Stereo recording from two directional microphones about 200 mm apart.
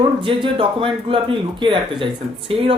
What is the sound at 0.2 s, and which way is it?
Speech, 25° right (ahead or behind).